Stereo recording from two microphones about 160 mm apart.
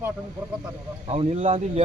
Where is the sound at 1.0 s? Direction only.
40° right (ahead or behind).